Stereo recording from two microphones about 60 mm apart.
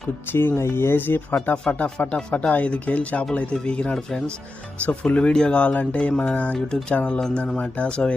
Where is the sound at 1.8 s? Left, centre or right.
Left.